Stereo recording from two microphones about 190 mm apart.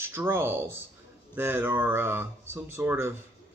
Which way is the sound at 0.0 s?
10° right (ahead or behind).